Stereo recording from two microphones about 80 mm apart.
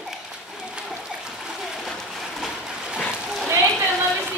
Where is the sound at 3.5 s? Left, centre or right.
Right.